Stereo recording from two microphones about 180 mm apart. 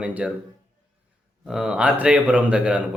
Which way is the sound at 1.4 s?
5° right (ahead or behind).